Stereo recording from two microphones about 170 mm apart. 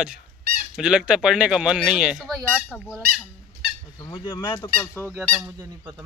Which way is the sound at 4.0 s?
30° left (ahead or behind).